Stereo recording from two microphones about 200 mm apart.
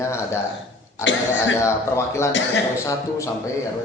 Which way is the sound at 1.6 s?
15° left (ahead or behind).